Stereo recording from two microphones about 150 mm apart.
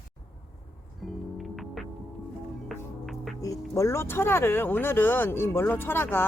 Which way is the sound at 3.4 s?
20° left (ahead or behind).